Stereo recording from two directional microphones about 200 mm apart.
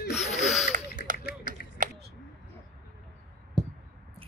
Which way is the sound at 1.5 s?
45° right (ahead or behind).